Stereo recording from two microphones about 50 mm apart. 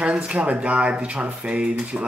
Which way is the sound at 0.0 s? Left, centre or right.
Right.